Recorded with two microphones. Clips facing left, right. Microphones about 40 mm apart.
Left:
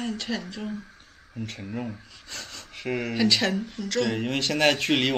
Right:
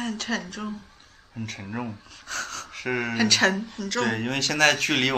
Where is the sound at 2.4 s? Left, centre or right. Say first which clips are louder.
Right 7 dB; right.